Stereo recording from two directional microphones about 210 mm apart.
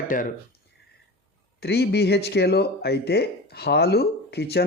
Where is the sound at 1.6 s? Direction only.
50° left (ahead or behind).